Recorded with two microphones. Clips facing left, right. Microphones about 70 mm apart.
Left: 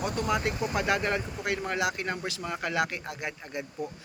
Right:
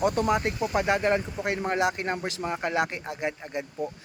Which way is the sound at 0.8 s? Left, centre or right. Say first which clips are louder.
Right 5 dB; right.